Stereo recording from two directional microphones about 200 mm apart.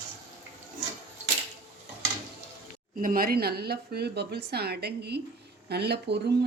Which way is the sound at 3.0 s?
45° right (ahead or behind).